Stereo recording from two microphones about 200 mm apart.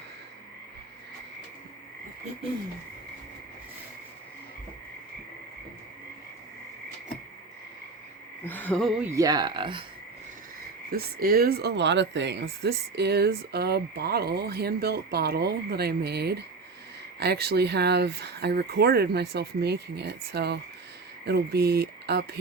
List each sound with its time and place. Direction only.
8.4 s speech: 10° left (ahead or behind)
9.0 s speech: 15° right (ahead or behind)
10.9 s speech: 50° right (ahead or behind)